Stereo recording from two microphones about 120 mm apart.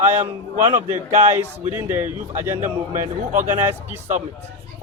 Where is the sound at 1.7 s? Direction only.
20° right (ahead or behind).